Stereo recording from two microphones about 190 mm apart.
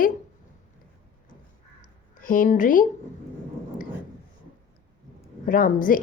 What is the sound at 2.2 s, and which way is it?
Speech, 45° left (ahead or behind).